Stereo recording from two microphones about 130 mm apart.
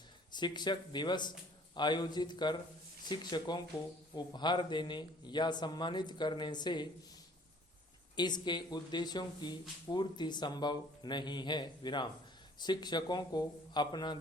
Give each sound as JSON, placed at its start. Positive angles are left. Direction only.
{"t": 0.3, "sound": "speech", "side_deg": 35}
{"t": 8.1, "sound": "speech", "side_deg": 35}